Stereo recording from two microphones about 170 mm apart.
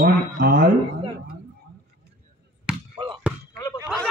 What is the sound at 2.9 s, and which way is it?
Basketball bounce, 25° right (ahead or behind).